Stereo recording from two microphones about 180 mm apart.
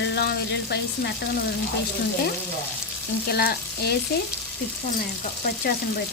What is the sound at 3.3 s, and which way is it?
Frying, 60° left (ahead or behind).